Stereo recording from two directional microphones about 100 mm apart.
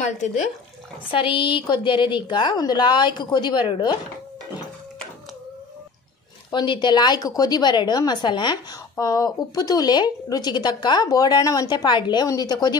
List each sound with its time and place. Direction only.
1.1 s a woman's voice: 60° left (ahead or behind)
6.5 s a woman's voice: 50° left (ahead or behind)
8.9 s speech: 35° left (ahead or behind)
11.7 s a woman's voice: 50° left (ahead or behind)